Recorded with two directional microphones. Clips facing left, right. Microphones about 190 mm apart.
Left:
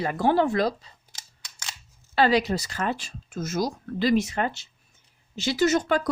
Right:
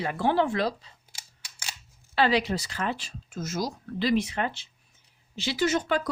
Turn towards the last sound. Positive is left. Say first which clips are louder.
# left 3 dB
turn(degrees=45)  # may be behind; listen again after turning